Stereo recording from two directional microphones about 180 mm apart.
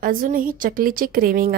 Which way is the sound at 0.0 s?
50° right (ahead or behind).